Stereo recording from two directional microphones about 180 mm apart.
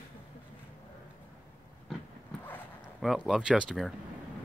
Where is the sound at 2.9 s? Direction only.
Centre (ahead or behind).